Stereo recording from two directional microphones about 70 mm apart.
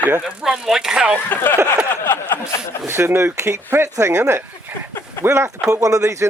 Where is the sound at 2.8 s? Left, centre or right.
Right.